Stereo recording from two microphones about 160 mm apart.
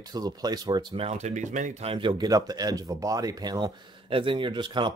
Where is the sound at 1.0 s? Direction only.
45° right (ahead or behind).